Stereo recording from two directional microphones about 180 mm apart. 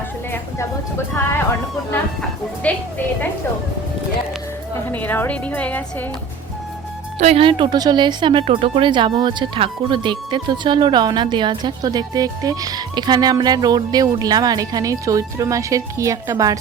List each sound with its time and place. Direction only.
2.6 s a woman's voice: 5° left (ahead or behind)
4.9 s a woman's voice: 10° left (ahead or behind)
7.2 s a woman's voice: 35° right (ahead or behind); by 16.6 s 20° right (ahead or behind)